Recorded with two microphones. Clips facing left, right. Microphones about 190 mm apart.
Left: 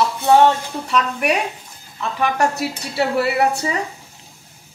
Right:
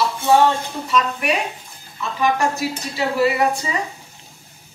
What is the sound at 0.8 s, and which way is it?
Speech, 65° left (ahead or behind).